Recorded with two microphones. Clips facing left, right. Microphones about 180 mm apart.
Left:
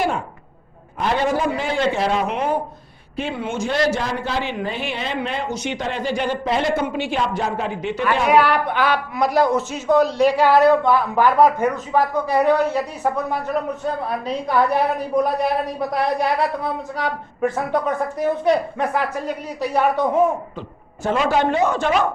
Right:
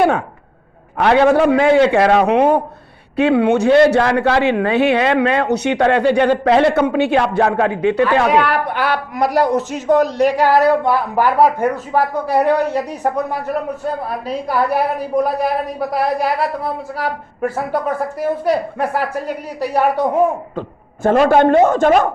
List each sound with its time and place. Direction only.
0.9 s speech: 70° right (ahead or behind)
8.8 s a woman's voice: 10° right (ahead or behind)
20.6 s a man's voice: 50° right (ahead or behind)